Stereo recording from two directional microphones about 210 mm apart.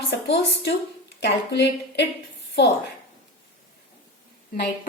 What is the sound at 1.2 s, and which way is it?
A woman's voice, 50° left (ahead or behind).